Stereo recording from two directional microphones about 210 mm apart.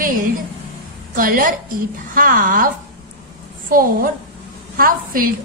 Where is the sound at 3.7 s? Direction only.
40° right (ahead or behind).